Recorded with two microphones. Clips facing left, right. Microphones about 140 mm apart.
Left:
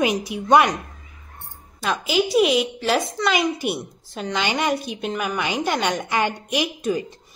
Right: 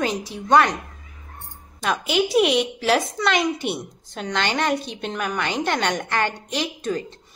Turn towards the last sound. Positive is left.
turn(degrees=10)  # may be behind; listen again after turning